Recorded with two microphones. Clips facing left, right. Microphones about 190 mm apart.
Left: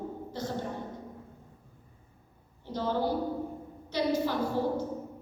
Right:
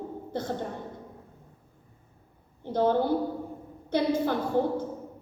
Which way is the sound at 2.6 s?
55° right (ahead or behind).